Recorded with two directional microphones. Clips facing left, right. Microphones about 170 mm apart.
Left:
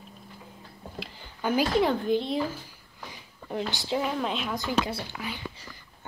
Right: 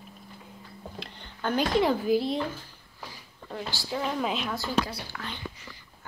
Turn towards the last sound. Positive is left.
turn(degrees=20)  # may be behind; listen again after turning